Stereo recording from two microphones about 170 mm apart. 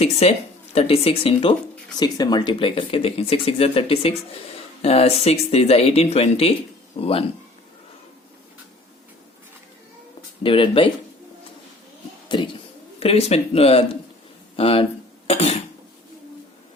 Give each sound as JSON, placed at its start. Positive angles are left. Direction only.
{"t": 0.0, "sound": "speech", "side_deg": 35}
{"t": 2.0, "sound": "speech", "side_deg": 25}
{"t": 10.4, "sound": "speech", "side_deg": 30}
{"t": 13.0, "sound": "speech", "side_deg": 35}